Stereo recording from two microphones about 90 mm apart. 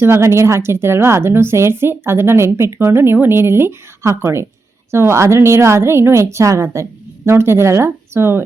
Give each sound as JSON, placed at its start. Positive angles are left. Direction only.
{"t": 0.0, "sound": "a woman's voice", "side_deg": -30}